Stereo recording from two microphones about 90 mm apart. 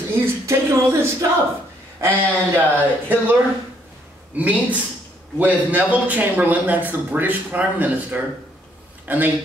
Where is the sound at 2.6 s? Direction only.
20° right (ahead or behind).